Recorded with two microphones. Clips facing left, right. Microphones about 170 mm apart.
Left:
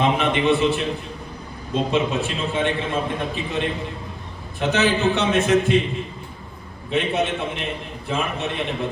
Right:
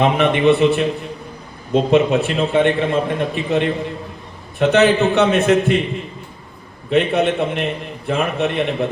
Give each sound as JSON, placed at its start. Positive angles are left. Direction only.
{"t": 0.0, "sound": "a man's voice", "side_deg": -60}
{"t": 4.7, "sound": "a man's voice", "side_deg": -60}
{"t": 6.9, "sound": "a man's voice", "side_deg": -60}